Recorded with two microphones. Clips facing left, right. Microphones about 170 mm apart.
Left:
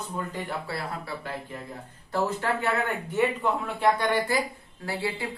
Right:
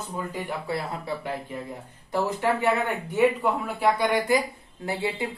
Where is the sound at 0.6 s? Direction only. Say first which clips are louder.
Right 4 dB; 20° right (ahead or behind).